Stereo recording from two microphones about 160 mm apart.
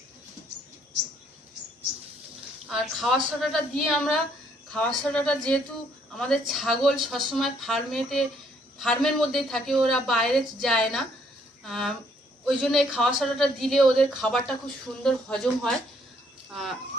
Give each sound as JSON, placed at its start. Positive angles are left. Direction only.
{"t": 2.6, "sound": "a woman's voice", "side_deg": 0}